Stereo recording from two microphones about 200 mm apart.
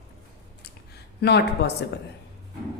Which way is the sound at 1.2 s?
55° left (ahead or behind).